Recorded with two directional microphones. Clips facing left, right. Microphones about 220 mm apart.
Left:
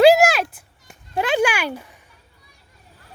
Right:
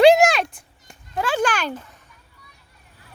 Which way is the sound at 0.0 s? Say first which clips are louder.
Even; 5° left (ahead or behind).